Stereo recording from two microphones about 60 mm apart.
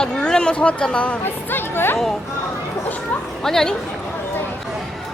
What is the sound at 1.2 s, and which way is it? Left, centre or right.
Speech, left.